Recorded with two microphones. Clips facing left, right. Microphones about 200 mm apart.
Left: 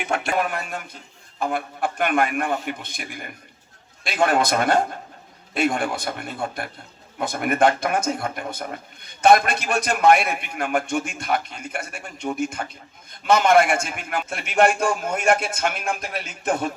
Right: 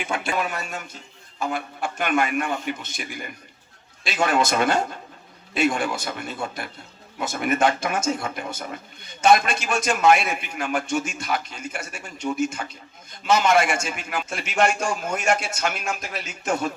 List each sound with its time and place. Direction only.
0.0 s a man's voice: 65° left (ahead or behind)
0.3 s a man's voice: 55° left (ahead or behind)